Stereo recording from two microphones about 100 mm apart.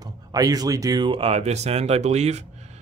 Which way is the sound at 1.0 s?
65° right (ahead or behind).